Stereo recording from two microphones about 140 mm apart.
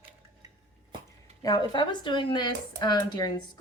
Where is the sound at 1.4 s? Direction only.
30° left (ahead or behind).